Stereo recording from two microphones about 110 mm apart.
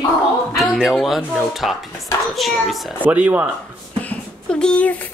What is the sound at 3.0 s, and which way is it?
Speech, 15° right (ahead or behind).